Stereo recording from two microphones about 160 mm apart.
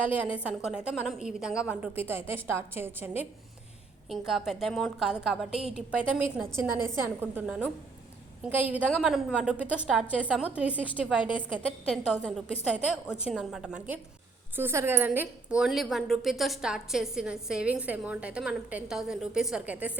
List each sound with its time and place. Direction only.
0.0 s a woman's voice: 10° right (ahead or behind)
4.3 s a woman's voice: centre (ahead or behind)
12.6 s a woman's voice: 5° right (ahead or behind)